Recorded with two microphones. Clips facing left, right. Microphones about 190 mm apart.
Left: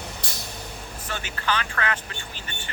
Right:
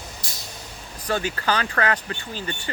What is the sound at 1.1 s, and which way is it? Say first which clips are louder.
Speech: right 6 dB; 40° right (ahead or behind).